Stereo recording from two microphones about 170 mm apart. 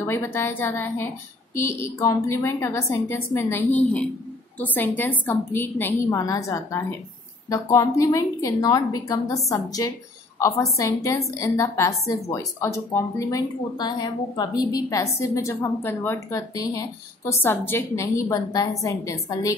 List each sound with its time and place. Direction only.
0.0 s a woman's voice: 15° left (ahead or behind)